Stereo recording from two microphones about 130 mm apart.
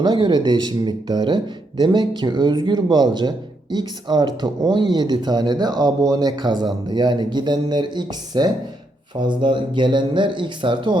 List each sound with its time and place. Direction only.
0.0 s a man's voice: 35° right (ahead or behind)